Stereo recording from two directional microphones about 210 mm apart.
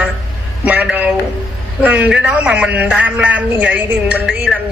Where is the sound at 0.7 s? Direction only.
5° right (ahead or behind).